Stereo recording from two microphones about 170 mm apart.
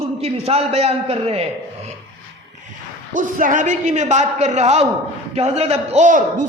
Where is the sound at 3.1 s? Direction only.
50° right (ahead or behind).